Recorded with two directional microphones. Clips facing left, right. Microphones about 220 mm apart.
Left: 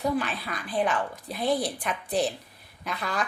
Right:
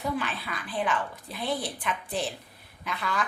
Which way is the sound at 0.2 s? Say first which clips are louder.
Left 3 dB; 40° left (ahead or behind).